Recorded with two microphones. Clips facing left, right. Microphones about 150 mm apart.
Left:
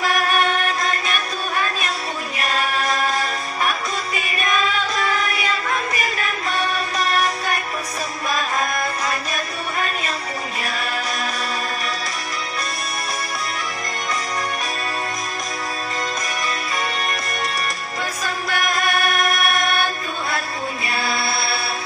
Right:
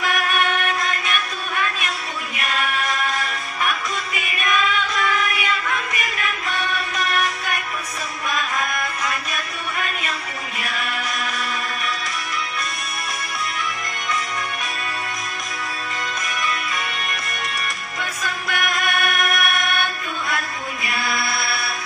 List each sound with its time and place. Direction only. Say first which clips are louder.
0.0 s music: left 2 dB; 35° left (ahead or behind)
10.6 s chant: even; 35° left (ahead or behind)
18.2 s music: left 1 dB; 35° left (ahead or behind)